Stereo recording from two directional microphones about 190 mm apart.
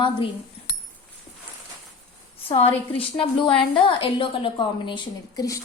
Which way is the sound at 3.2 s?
25° left (ahead or behind).